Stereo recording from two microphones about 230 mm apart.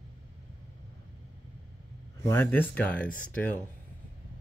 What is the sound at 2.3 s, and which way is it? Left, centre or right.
Speech, centre.